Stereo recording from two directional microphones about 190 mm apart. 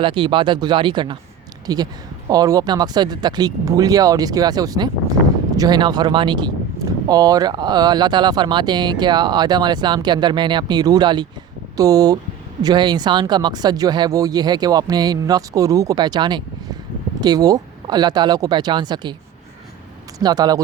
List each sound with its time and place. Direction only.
0.0 s speech: 25° right (ahead or behind)
20.1 s speech: 20° right (ahead or behind)